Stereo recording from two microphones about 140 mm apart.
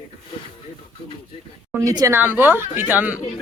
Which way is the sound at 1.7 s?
25° right (ahead or behind).